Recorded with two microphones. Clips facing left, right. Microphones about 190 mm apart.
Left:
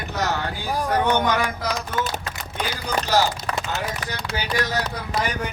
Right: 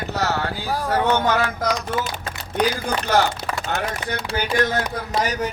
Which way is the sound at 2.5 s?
55° right (ahead or behind).